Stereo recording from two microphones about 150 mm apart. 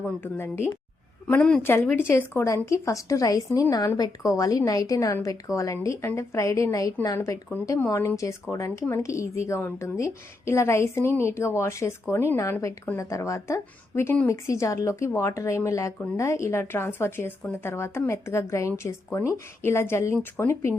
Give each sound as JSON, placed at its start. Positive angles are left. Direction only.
{"t": 0.0, "sound": "a woman's voice", "side_deg": 15}